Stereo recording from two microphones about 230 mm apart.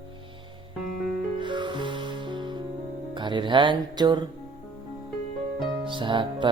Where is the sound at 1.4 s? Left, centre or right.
Centre.